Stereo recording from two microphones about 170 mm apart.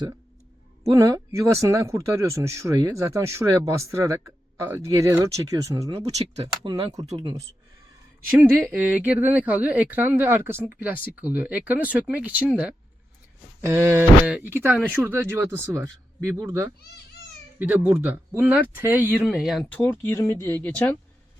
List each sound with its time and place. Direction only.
0.9 s speech: 20° right (ahead or behind)
5.9 s speech: 40° right (ahead or behind)
6.7 s speech: 25° right (ahead or behind); by 19.8 s centre (ahead or behind)
19.8 s speech: 10° left (ahead or behind)